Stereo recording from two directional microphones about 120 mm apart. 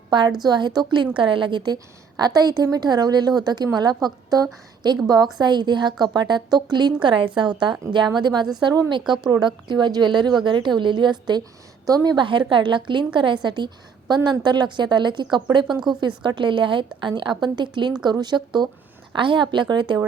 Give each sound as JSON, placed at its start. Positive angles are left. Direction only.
{"t": 0.1, "sound": "a woman's voice", "side_deg": -40}
{"t": 9.0, "sound": "speech", "side_deg": -5}
{"t": 9.3, "sound": "a woman's voice", "side_deg": -40}